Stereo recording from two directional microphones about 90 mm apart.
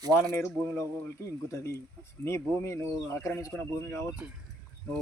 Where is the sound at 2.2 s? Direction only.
30° left (ahead or behind).